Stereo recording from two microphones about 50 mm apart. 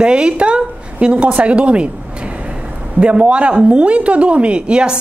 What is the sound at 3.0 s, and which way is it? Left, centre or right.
A woman's voice, right.